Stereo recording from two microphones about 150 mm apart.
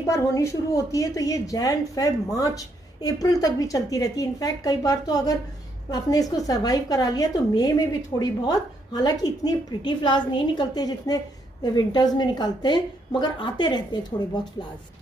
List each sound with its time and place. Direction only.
0.1 s a woman's voice: 20° left (ahead or behind)